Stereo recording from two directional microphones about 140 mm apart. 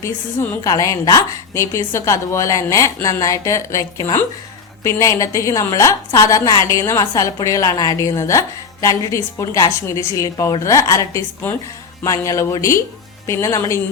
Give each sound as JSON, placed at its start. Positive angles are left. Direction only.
{"t": 0.0, "sound": "a woman's voice", "side_deg": 20}